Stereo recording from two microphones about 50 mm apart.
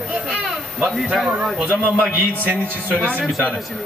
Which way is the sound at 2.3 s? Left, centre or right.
Right.